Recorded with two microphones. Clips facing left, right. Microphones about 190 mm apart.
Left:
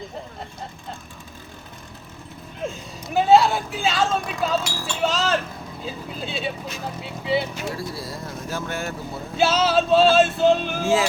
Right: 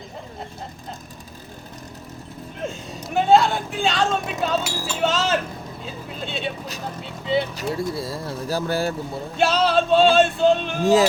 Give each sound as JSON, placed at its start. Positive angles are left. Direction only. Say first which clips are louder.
{"t": 2.6, "sound": "speech", "louder": "even", "side_deg": 0}
{"t": 7.7, "sound": "speech", "louder": "right 5 dB", "side_deg": -25}
{"t": 9.4, "sound": "speech", "louder": "even", "side_deg": 5}